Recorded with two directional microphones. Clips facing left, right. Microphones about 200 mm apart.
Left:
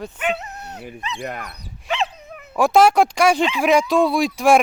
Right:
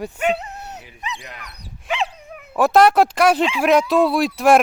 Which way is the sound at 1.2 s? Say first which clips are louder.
Left 10 dB; 55° left (ahead or behind).